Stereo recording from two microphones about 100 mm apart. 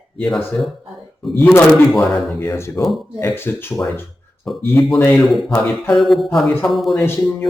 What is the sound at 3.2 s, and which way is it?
Speech, 20° left (ahead or behind).